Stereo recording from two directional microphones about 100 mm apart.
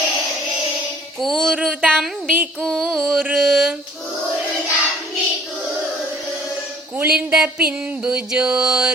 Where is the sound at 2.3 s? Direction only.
15° right (ahead or behind).